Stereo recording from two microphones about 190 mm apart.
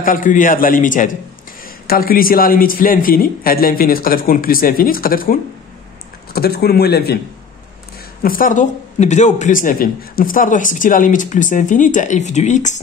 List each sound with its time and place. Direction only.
0.0 s a man's voice: 45° left (ahead or behind)
8.2 s a man's voice: 50° left (ahead or behind)